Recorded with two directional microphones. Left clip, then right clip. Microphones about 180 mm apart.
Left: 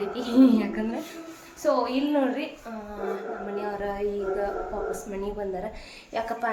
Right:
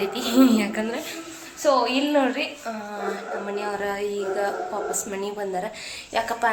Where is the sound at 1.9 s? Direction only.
15° right (ahead or behind).